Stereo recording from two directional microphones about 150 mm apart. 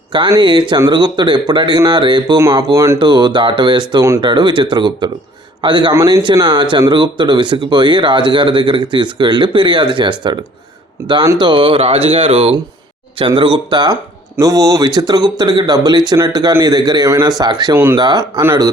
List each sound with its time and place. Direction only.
0.1 s speech: 30° right (ahead or behind)
3.0 s speech: 30° right (ahead or behind)